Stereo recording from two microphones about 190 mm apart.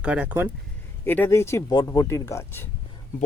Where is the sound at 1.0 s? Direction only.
10° left (ahead or behind).